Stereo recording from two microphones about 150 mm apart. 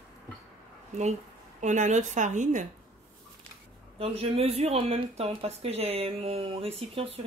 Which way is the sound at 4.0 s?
40° right (ahead or behind).